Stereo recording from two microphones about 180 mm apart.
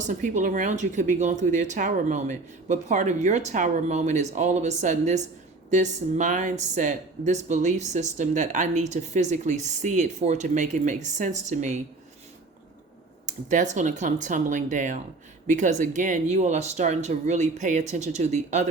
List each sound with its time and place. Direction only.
0.0 s speech: 45° right (ahead or behind)
13.2 s speech: 45° right (ahead or behind)